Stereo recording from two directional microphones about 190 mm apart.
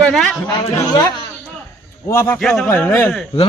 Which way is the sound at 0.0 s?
Centre (ahead or behind).